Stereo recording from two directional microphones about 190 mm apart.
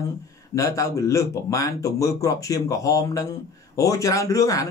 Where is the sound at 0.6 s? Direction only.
15° left (ahead or behind).